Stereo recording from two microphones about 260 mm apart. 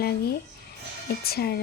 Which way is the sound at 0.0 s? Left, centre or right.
Left.